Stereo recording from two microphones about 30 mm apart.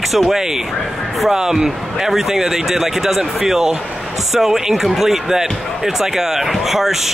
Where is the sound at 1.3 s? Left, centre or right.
Centre.